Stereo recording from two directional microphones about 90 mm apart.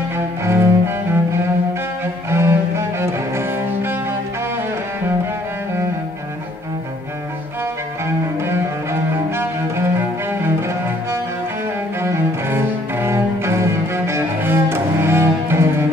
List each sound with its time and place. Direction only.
0.5 s cello: 30° right (ahead or behind)
9.4 s cello: 25° right (ahead or behind)
12.0 s cello: 25° right (ahead or behind)